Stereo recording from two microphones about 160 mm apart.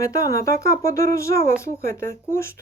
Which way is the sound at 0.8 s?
20° left (ahead or behind).